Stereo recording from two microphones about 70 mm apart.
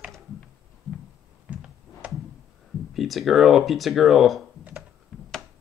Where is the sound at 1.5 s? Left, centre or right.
Centre.